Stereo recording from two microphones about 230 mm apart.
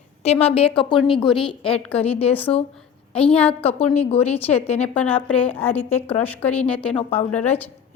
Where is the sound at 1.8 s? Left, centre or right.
Centre.